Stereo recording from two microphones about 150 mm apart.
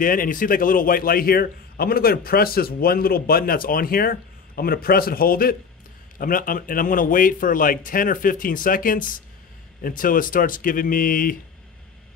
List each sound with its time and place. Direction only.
0.0 s a man's voice: 70° left (ahead or behind)